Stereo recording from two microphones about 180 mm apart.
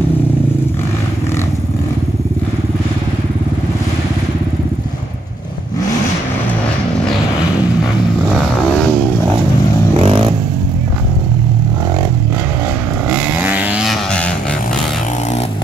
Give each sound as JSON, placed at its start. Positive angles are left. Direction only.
{"t": 10.0, "sound": "vehicle", "side_deg": -30}
{"t": 13.1, "sound": "vehicle", "side_deg": -5}